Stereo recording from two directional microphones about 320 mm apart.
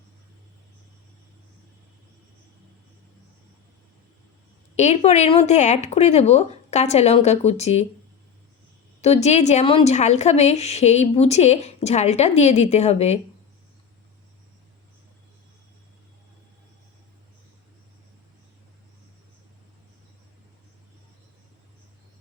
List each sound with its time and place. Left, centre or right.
4.8 s a woman's voice: left
9.0 s a woman's voice: centre